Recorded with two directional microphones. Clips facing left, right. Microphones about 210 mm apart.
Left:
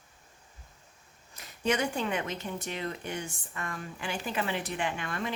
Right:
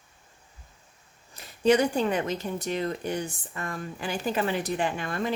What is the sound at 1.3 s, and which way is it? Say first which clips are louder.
Speech: right 8 dB; 35° right (ahead or behind).